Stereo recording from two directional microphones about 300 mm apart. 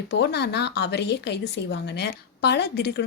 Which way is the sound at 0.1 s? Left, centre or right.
Left.